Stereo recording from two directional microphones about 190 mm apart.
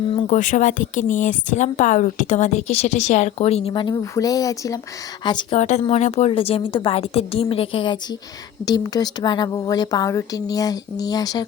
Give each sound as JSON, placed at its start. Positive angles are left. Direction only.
{"t": 0.1, "sound": "speech", "side_deg": 25}
{"t": 0.3, "sound": "speech", "side_deg": 40}
{"t": 5.5, "sound": "speech", "side_deg": 40}